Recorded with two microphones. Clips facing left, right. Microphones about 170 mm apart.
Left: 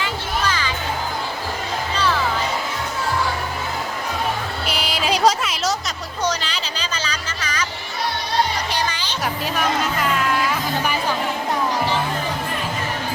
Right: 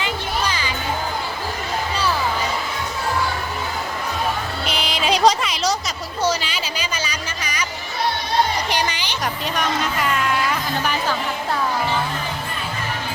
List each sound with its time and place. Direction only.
0.0 s music: 15° right (ahead or behind)
4.6 s music: 5° left (ahead or behind)
6.2 s music: 10° right (ahead or behind)
8.7 s music: 15° right (ahead or behind)
9.2 s speech: 5° left (ahead or behind)